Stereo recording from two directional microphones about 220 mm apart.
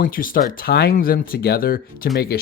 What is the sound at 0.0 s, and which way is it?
Speech, 40° left (ahead or behind).